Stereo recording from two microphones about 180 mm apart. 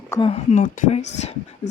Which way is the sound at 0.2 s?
35° left (ahead or behind).